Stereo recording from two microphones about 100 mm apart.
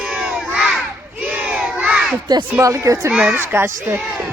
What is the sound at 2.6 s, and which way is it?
Speech, 35° right (ahead or behind).